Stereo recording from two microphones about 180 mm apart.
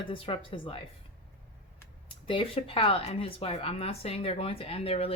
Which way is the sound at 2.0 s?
30° left (ahead or behind).